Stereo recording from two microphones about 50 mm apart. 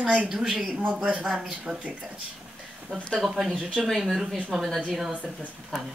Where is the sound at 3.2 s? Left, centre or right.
Centre.